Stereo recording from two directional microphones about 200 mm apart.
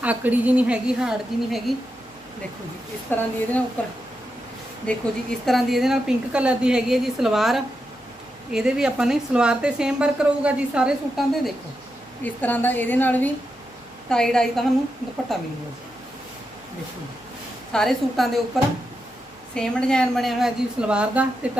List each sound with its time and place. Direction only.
0.0 s a woman's voice: 10° right (ahead or behind)
3.1 s a woman's voice: 10° left (ahead or behind)
12.2 s a woman's voice: 10° left (ahead or behind)
17.7 s a woman's voice: centre (ahead or behind)